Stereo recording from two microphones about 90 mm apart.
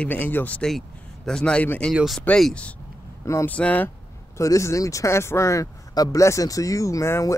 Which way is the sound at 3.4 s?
15° left (ahead or behind).